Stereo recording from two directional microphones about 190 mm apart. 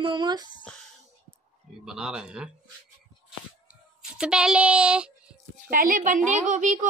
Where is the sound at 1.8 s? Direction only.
5° right (ahead or behind).